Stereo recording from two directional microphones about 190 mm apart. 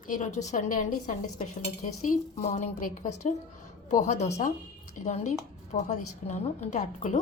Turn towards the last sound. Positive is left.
turn(degrees=40)  # may be behind; listen again after turning